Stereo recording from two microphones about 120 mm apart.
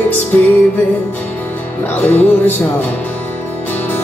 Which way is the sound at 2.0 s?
15° left (ahead or behind).